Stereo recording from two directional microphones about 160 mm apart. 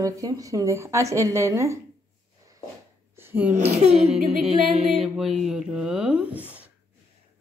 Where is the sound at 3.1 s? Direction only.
15° right (ahead or behind).